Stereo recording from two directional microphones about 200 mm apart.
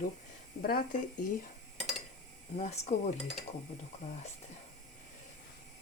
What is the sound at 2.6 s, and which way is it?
Speech, 35° left (ahead or behind).